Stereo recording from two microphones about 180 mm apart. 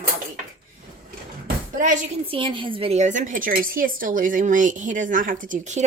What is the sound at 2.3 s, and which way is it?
A woman's voice, 30° right (ahead or behind).